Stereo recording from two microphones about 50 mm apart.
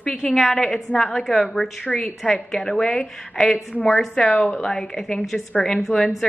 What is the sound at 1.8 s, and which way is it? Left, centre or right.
A woman's voice, left.